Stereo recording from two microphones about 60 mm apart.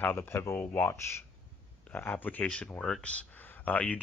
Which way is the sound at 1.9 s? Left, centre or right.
Left.